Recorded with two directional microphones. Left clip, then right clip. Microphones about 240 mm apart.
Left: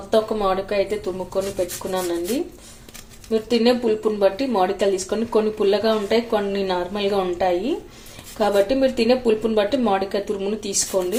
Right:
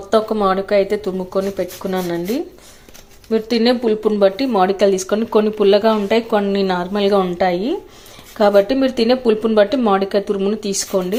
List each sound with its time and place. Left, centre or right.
0.1 s speech: right